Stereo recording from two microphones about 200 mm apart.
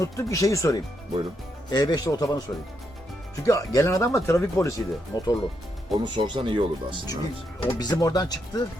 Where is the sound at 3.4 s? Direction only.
15° left (ahead or behind).